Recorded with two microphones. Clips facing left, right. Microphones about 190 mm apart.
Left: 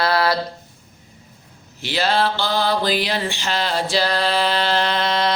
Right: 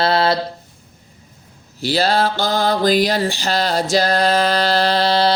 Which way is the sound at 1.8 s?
35° right (ahead or behind).